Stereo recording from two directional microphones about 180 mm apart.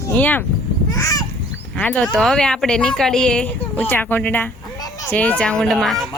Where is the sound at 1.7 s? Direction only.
5° left (ahead or behind).